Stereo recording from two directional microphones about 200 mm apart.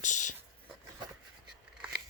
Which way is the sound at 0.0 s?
40° left (ahead or behind).